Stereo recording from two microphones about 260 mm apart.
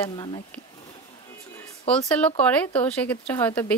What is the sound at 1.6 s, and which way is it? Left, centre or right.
Speech, centre.